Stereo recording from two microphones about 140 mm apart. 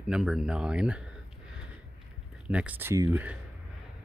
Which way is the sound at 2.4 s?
10° right (ahead or behind).